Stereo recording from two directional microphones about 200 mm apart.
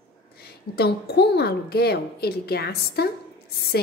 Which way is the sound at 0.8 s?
55° left (ahead or behind).